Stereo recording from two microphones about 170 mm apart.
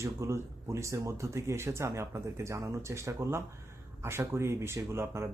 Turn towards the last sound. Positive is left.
turn(degrees=-15)  # may be behind; listen again after turning